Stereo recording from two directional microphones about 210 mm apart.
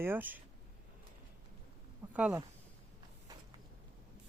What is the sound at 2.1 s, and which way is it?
Speech, 5° right (ahead or behind).